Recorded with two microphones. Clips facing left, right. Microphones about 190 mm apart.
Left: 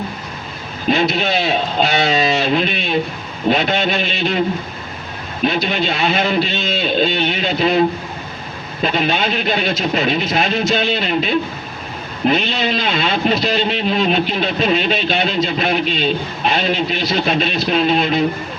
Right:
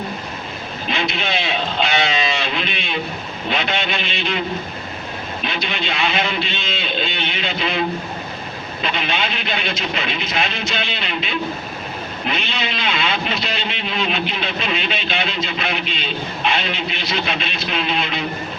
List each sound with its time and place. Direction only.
0.9 s speech: 45° left (ahead or behind)